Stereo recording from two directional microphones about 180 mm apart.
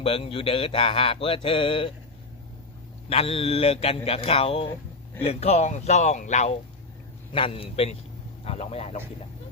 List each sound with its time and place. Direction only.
0.0 s mantra: 30° left (ahead or behind)
3.1 s mantra: 30° left (ahead or behind)